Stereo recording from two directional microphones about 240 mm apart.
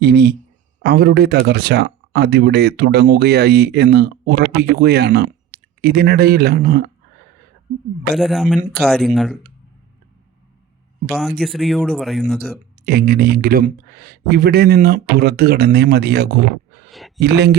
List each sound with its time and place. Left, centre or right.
0.0 s speech: right
8.1 s speech: centre
11.1 s speech: centre
12.8 s speech: right